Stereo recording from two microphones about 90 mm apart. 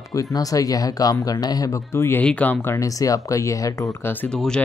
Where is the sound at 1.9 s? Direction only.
30° left (ahead or behind).